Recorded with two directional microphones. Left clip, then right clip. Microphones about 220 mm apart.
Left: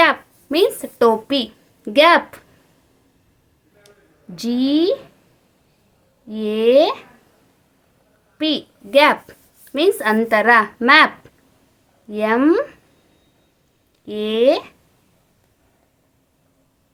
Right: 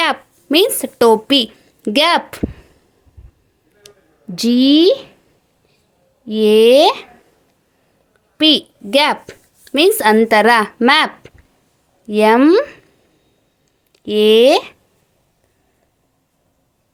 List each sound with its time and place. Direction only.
0.0 s a woman's voice: 35° right (ahead or behind)
3.9 s a sound: 30° right (ahead or behind)
4.4 s speech: 35° right (ahead or behind)
6.2 s speech: 35° right (ahead or behind)
8.4 s a woman's voice: 35° right (ahead or behind)
13.9 s speech: 35° right (ahead or behind)